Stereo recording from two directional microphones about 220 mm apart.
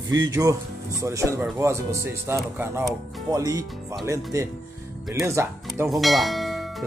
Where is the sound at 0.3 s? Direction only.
15° right (ahead or behind).